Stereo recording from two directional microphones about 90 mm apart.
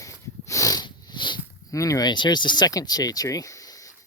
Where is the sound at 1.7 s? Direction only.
40° left (ahead or behind).